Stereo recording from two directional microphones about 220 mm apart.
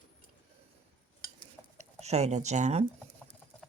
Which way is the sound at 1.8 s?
30° right (ahead or behind).